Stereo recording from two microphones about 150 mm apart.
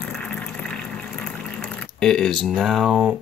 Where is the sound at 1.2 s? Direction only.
5° left (ahead or behind).